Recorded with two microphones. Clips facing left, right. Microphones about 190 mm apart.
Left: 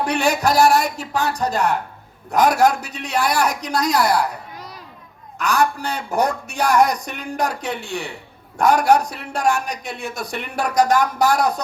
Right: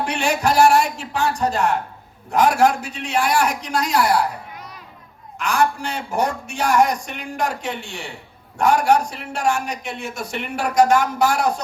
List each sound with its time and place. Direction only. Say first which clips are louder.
0.0 s a man's voice: left 2 dB; 35° left (ahead or behind)